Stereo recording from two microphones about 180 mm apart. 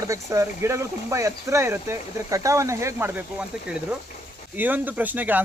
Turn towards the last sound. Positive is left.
turn(degrees=-10)  # may be behind; listen again after turning